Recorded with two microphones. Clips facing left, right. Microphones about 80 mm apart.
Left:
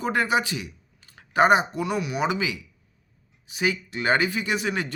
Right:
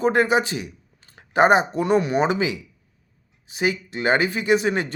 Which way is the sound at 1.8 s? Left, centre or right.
Right.